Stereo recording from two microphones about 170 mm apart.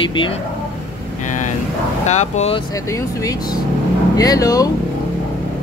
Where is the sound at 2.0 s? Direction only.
45° left (ahead or behind).